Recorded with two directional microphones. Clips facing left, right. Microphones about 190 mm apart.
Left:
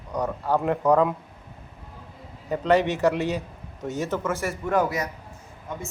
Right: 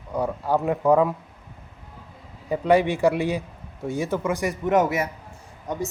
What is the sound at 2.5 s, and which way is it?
Speech, 10° right (ahead or behind).